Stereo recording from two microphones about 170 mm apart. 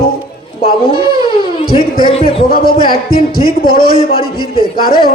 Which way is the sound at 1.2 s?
30° left (ahead or behind).